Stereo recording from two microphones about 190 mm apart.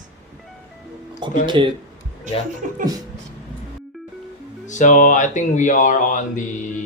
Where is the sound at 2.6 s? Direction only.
40° right (ahead or behind).